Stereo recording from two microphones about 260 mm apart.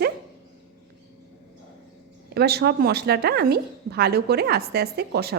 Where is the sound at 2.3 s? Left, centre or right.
Right.